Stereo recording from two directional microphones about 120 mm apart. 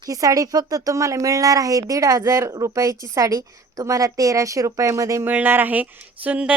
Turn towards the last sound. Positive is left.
turn(degrees=-10)  # may be behind; listen again after turning